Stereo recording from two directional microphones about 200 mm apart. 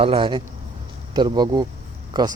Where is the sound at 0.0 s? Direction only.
25° right (ahead or behind).